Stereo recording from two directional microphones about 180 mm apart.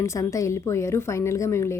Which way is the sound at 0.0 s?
15° left (ahead or behind).